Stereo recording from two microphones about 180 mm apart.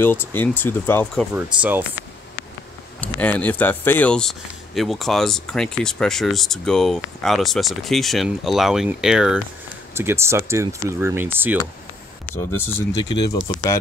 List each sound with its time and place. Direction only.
0.0 s speech: 10° left (ahead or behind)
1.3 s speech: 10° right (ahead or behind)
3.0 s speech: 10° left (ahead or behind); by 11.6 s 10° right (ahead or behind)
13.1 s speech: 25° left (ahead or behind)